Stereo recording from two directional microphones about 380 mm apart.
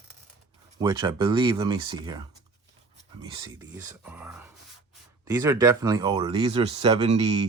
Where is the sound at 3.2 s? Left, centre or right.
Centre.